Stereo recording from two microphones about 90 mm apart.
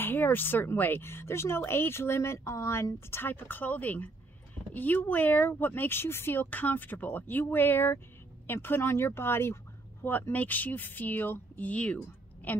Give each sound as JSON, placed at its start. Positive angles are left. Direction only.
{"t": 0.0, "sound": "speech", "side_deg": 20}